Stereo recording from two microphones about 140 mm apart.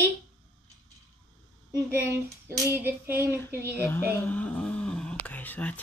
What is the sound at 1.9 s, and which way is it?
Speech, 20° right (ahead or behind).